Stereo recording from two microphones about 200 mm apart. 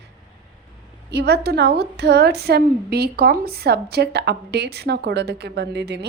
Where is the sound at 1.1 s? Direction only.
55° right (ahead or behind).